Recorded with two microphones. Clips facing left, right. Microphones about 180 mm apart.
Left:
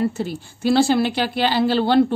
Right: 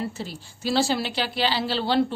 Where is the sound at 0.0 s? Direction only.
55° left (ahead or behind).